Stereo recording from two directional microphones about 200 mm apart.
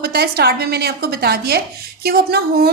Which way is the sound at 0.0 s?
50° right (ahead or behind).